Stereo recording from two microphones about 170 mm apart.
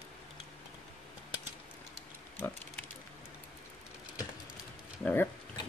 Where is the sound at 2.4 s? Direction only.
10° left (ahead or behind).